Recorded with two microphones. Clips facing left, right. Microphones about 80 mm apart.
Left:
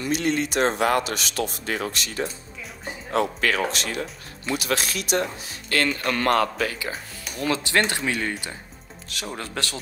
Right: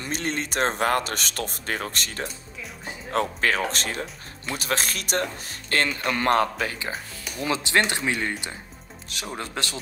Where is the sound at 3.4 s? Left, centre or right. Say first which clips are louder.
Left 1 dB; right.